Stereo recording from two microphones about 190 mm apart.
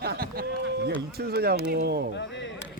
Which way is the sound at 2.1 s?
70° left (ahead or behind).